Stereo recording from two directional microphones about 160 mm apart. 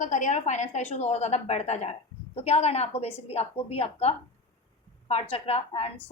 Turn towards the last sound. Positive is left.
turn(degrees=40)  # may be behind; listen again after turning